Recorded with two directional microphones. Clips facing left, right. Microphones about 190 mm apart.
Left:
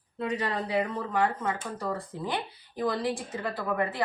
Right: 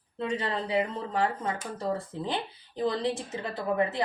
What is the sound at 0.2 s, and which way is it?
Speech, 30° right (ahead or behind).